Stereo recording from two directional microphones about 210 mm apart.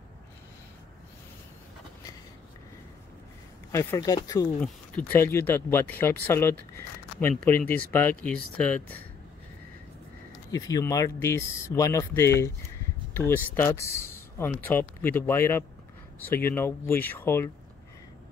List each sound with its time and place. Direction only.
3.7 s speech: 15° left (ahead or behind)
10.5 s speech: 15° left (ahead or behind)